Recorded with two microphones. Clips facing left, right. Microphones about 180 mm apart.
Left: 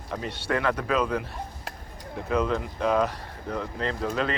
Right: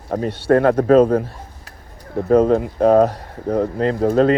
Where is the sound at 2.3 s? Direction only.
50° right (ahead or behind).